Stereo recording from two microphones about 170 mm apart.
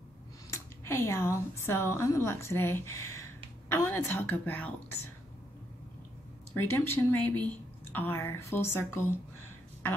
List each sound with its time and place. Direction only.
0.5 s a woman's voice: 15° left (ahead or behind)
6.5 s a woman's voice: 15° left (ahead or behind)